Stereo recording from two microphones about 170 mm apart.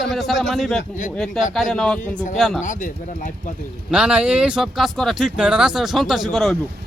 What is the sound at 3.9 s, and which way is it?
Speech, 5° right (ahead or behind).